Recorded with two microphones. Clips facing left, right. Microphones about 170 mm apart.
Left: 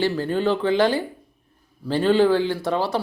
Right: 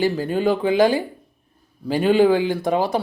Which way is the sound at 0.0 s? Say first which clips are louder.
Right 2 dB; 10° right (ahead or behind).